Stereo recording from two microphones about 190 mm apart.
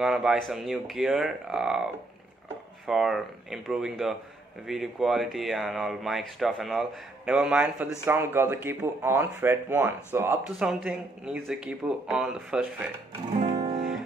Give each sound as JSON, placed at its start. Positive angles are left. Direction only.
{"t": 0.0, "sound": "speech", "side_deg": 0}
{"t": 2.9, "sound": "speech", "side_deg": 0}
{"t": 13.4, "sound": "music", "side_deg": -20}